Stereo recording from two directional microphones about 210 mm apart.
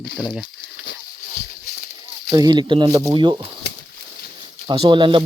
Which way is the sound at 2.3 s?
20° right (ahead or behind).